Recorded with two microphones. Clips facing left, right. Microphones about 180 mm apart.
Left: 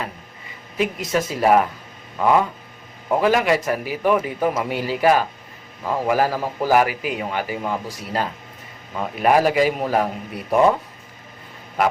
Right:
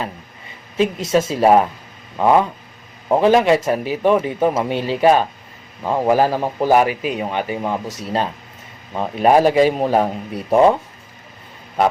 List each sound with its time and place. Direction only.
0.8 s a man's voice: 25° right (ahead or behind)